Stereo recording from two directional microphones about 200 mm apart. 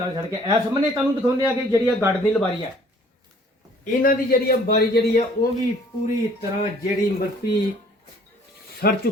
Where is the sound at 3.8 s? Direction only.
45° left (ahead or behind).